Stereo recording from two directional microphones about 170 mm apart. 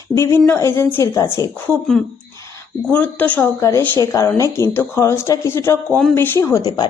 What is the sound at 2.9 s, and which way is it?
A woman's voice, 10° left (ahead or behind).